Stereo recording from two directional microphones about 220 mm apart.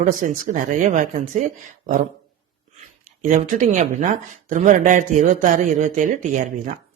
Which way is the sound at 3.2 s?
35° right (ahead or behind).